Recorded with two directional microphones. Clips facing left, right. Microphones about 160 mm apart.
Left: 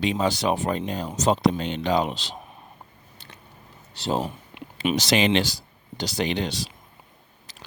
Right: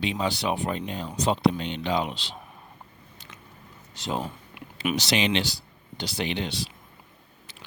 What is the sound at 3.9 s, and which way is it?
Speech, 35° left (ahead or behind).